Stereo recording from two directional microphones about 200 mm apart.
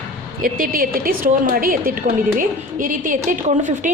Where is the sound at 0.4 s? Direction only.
45° right (ahead or behind).